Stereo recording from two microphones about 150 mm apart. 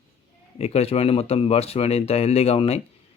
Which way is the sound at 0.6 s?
45° left (ahead or behind).